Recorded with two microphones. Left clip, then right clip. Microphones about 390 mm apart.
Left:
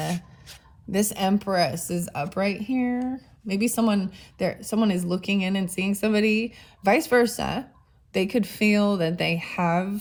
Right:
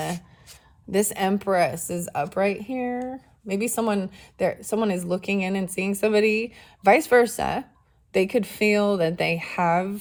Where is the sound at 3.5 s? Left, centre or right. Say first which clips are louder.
Even; centre.